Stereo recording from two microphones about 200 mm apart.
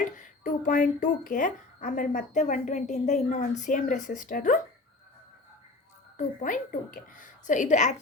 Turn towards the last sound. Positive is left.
turn(degrees=35)  # may be behind; listen again after turning